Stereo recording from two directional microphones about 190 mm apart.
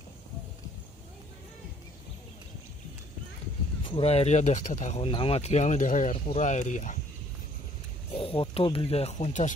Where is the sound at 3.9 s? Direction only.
30° left (ahead or behind).